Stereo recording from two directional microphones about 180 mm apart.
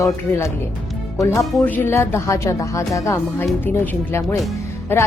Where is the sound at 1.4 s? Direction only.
Centre (ahead or behind).